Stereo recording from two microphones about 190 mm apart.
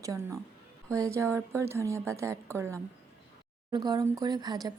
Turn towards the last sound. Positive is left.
turn(degrees=-20)  # may be behind; listen again after turning